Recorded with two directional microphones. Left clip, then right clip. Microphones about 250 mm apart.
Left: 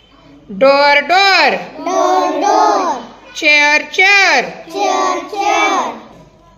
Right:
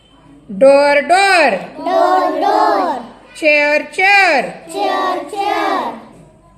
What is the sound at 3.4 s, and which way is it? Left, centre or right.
A woman's voice, centre.